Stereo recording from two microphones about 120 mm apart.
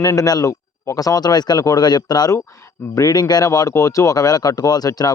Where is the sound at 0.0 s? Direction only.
30° left (ahead or behind).